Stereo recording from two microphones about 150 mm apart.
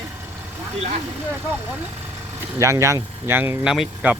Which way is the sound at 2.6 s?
20° right (ahead or behind).